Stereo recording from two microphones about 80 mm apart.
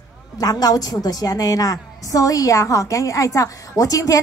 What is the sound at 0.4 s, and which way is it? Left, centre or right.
A woman's voice, left.